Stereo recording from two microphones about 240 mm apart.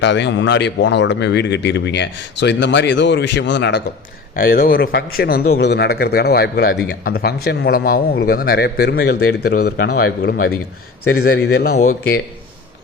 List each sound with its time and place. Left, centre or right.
0.0 s speech: left